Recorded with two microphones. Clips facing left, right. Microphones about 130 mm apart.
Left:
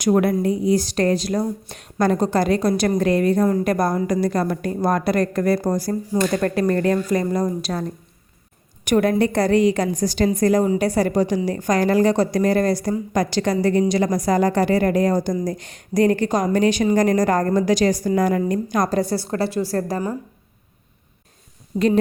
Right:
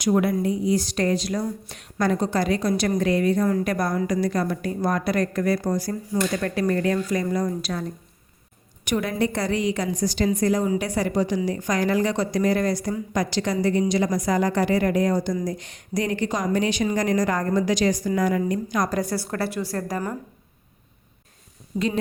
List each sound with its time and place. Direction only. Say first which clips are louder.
0.0 s speech: left 3 dB; 50° left (ahead or behind)
8.8 s a woman's voice: left 6 dB; 50° left (ahead or behind)
10.7 s a woman's voice: left 5 dB; 40° left (ahead or behind)
18.9 s a woman's voice: left 4 dB; 30° left (ahead or behind)
21.7 s a woman's voice: left 6 dB; 25° left (ahead or behind)